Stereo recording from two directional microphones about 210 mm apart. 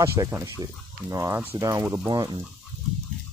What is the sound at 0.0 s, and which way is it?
Speech, 15° right (ahead or behind).